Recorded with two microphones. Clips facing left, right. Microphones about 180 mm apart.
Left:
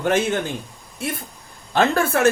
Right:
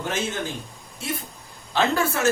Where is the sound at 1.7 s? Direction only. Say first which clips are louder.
Left 4 dB; 55° left (ahead or behind).